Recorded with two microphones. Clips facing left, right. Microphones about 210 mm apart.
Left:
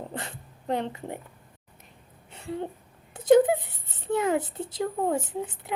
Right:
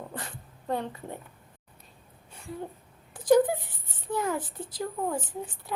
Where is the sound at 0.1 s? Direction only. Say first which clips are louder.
Left 3 dB; 25° left (ahead or behind).